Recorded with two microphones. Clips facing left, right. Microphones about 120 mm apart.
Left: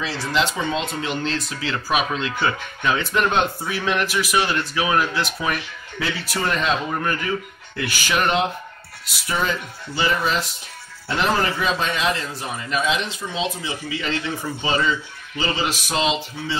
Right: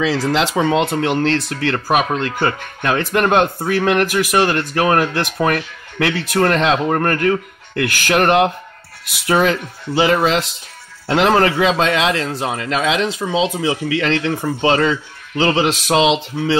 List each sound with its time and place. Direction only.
0.0 s speech: 90° right